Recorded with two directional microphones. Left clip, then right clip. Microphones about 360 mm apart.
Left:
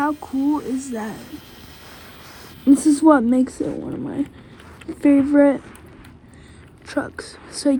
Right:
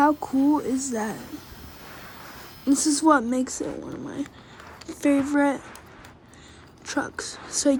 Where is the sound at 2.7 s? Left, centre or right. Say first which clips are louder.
Left 6 dB; centre.